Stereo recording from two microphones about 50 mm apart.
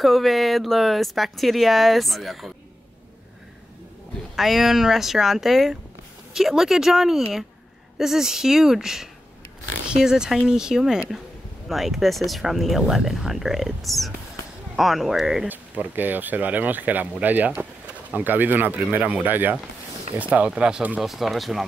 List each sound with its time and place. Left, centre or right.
0.0 s speech: centre
4.4 s speech: centre
15.4 s speech: right
20.2 s speech: right
21.0 s speech: centre